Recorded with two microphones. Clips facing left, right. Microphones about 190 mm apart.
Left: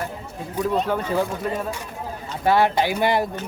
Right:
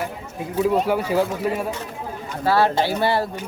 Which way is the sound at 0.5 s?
10° right (ahead or behind).